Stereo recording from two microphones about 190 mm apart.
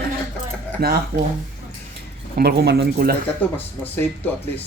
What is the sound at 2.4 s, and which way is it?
Speech, 60° right (ahead or behind).